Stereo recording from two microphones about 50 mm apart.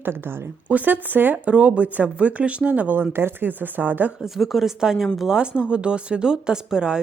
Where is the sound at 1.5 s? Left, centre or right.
Right.